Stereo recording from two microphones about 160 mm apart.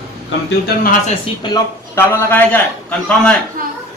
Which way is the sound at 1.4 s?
25° left (ahead or behind).